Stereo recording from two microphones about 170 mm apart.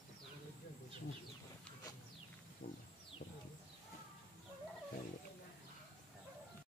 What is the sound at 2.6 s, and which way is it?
Wild animals, 75° left (ahead or behind).